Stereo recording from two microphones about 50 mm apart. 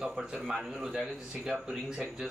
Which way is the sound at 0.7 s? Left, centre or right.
Centre.